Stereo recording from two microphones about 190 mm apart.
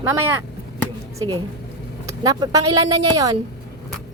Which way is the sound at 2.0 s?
20° right (ahead or behind).